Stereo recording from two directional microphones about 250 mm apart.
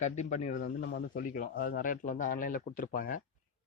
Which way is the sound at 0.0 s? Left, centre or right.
Left.